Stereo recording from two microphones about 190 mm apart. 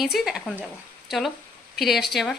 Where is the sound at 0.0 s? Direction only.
Centre (ahead or behind).